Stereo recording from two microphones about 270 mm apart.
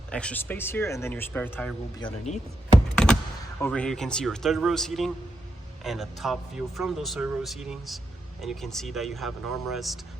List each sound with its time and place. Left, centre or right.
0.1 s speech: centre
2.0 s speech: left
2.7 s computer keyboard: centre
3.6 s speech: centre